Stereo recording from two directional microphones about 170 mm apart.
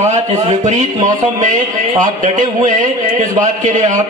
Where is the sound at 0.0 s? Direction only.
40° right (ahead or behind).